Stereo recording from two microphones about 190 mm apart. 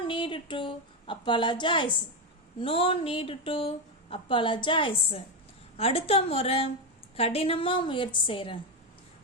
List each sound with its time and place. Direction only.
0.1 s a woman's voice: 25° left (ahead or behind)